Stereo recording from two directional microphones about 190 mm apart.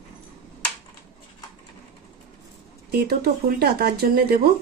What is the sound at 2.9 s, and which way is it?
Speech, 55° right (ahead or behind).